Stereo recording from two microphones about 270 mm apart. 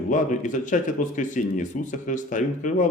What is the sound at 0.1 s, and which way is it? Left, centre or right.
Speech, left.